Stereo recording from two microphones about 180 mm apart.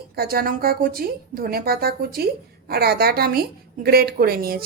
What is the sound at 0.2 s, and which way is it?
A woman's voice, 55° right (ahead or behind).